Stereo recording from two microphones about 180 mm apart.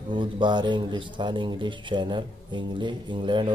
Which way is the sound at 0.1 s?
25° right (ahead or behind).